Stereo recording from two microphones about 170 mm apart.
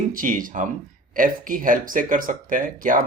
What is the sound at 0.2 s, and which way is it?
Speech, 55° right (ahead or behind).